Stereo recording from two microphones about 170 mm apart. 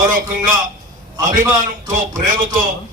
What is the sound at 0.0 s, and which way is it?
Speech, 55° right (ahead or behind).